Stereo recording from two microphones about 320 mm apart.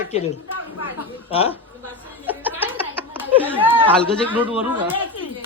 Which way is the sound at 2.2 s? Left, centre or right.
Centre.